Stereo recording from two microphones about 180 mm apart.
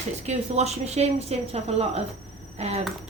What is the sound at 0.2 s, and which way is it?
Speech, 40° right (ahead or behind).